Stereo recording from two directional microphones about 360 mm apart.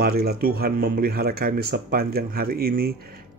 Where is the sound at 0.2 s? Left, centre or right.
Right.